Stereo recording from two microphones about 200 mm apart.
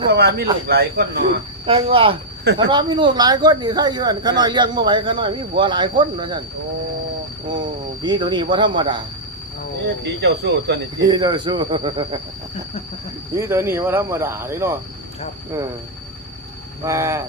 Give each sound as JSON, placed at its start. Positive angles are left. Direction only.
{"t": 0.1, "sound": "speech", "side_deg": -55}
{"t": 1.6, "sound": "speech", "side_deg": -25}
{"t": 8.0, "sound": "speech", "side_deg": -20}
{"t": 10.0, "sound": "speech", "side_deg": -55}
{"t": 11.1, "sound": "speech", "side_deg": -20}
{"t": 13.3, "sound": "cricket", "side_deg": -15}
{"t": 16.8, "sound": "cricket", "side_deg": -15}